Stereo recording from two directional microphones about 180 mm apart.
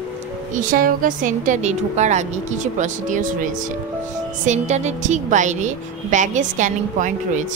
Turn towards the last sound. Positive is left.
turn(degrees=-45)  # may be behind; listen again after turning